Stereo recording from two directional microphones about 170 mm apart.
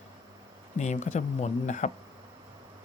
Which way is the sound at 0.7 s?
45° left (ahead or behind).